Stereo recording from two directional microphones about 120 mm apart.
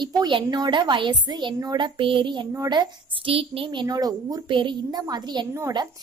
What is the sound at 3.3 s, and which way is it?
A woman's voice, 50° right (ahead or behind).